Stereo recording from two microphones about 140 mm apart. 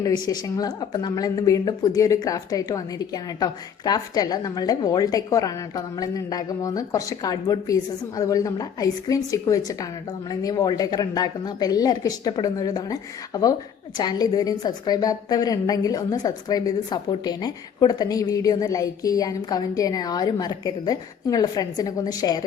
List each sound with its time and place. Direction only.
0.0 s a woman's voice: 30° left (ahead or behind)